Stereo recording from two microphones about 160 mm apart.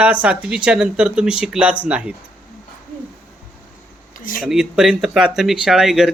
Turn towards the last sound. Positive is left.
turn(degrees=-5)  # may be behind; listen again after turning